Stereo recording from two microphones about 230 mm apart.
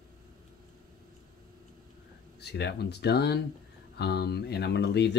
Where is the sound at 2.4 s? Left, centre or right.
Left.